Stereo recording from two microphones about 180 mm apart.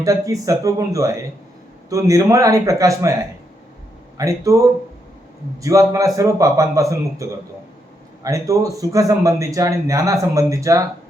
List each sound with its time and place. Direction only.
0.0 s a man's voice: 20° right (ahead or behind)
4.2 s a man's voice: 20° right (ahead or behind)